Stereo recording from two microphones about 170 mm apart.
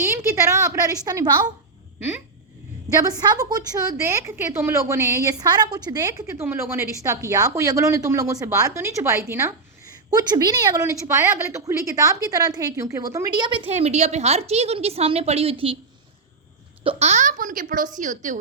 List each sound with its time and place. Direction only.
0.1 s a woman's voice: 15° right (ahead or behind)
3.0 s a woman's voice: 20° right (ahead or behind)
13.7 s a woman's voice: 40° right (ahead or behind)
16.8 s a woman's voice: 35° right (ahead or behind)